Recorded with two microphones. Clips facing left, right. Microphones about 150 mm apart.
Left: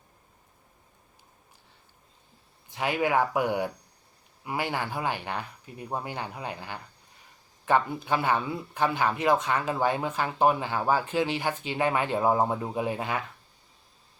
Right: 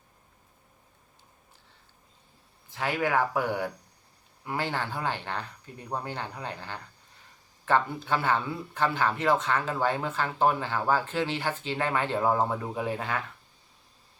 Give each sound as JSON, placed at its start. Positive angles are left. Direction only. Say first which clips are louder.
{"t": 2.6, "sound": "a man's voice", "louder": "left 2 dB", "side_deg": 15}